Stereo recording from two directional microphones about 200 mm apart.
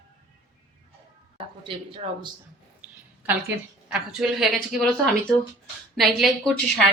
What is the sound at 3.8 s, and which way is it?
Speech, 5° right (ahead or behind).